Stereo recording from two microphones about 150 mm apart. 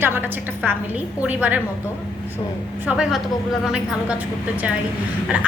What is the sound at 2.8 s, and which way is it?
A woman's voice, 5° right (ahead or behind).